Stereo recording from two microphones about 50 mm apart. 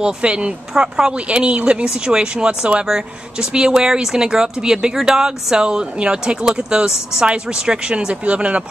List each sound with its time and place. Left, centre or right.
0.0 s speech: right